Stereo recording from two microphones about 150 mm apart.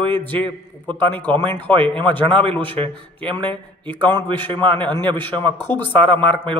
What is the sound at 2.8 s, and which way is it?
A man's voice, 30° right (ahead or behind).